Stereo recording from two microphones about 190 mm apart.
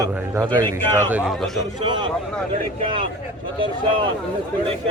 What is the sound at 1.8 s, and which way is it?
Speech, 25° right (ahead or behind).